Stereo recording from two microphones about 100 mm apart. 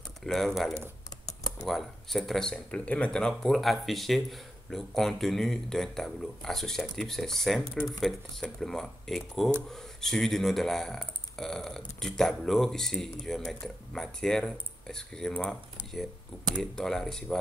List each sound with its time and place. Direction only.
0.2 s speech: 5° left (ahead or behind)
1.2 s computer keyboard: 35° left (ahead or behind)
1.7 s speech: centre (ahead or behind)